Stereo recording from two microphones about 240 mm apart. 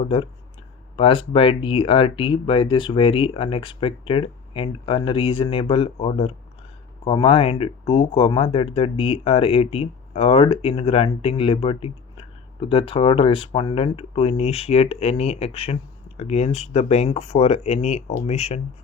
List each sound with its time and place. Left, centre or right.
0.9 s speech: left